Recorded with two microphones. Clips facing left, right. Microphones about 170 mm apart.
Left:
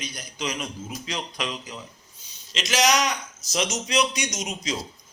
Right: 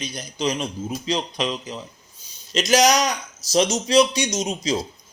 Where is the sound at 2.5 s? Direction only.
40° right (ahead or behind).